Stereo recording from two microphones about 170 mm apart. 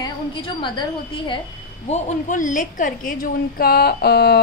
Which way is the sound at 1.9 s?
45° left (ahead or behind).